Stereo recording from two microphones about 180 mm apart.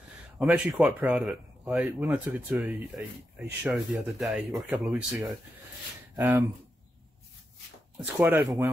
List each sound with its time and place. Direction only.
0.4 s speech: 5° right (ahead or behind)
6.1 s speech: 15° right (ahead or behind)
8.0 s speech: 5° right (ahead or behind)